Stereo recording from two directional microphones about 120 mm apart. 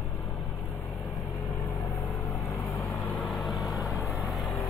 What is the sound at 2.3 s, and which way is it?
Vehicle, 25° left (ahead or behind).